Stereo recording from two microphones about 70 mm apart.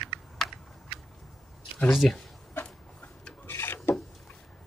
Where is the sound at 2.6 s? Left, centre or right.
Centre.